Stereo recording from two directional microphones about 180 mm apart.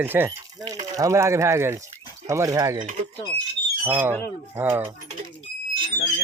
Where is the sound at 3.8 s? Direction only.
10° right (ahead or behind).